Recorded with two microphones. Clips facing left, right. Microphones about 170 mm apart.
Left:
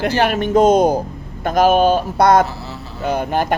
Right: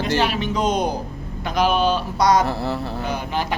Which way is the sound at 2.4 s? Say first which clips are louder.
Right 6 dB; 55° right (ahead or behind).